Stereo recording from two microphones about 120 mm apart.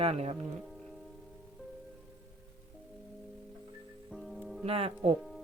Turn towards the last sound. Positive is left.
turn(degrees=0)  # may be behind; listen again after turning